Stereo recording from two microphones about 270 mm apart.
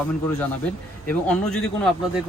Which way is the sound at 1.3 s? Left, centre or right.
Centre.